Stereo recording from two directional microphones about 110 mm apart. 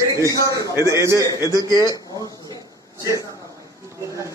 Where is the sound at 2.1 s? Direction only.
35° right (ahead or behind).